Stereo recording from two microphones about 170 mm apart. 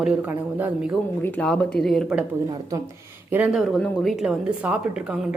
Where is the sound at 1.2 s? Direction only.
5° left (ahead or behind).